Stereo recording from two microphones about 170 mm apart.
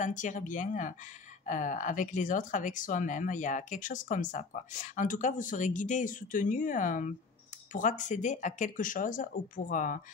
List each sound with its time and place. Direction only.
0.0 s speech: 50° left (ahead or behind)